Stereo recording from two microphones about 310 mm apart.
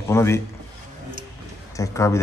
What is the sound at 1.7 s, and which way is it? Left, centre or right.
Speech, centre.